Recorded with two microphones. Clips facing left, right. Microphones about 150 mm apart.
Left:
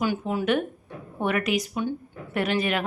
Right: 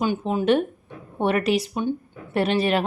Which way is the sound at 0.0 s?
20° right (ahead or behind).